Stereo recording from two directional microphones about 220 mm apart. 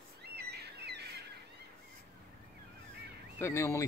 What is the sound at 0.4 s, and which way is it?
Bird, 50° right (ahead or behind).